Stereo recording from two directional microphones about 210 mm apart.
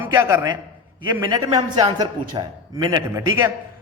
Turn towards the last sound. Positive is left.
turn(degrees=-15)  # may be behind; listen again after turning